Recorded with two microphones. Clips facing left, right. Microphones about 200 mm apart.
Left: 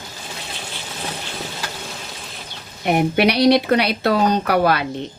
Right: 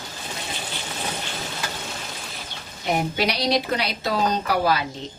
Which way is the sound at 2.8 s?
60° left (ahead or behind).